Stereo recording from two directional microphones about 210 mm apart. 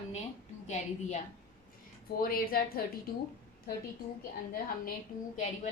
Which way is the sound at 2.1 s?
45° left (ahead or behind).